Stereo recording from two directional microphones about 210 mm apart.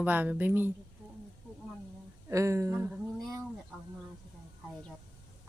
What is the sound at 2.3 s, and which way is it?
Speech, 15° right (ahead or behind).